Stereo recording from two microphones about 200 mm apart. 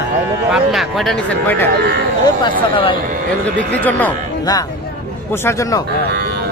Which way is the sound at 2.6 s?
25° left (ahead or behind).